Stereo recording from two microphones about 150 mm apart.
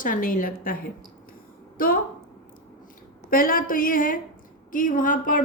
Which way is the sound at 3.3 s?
70° left (ahead or behind).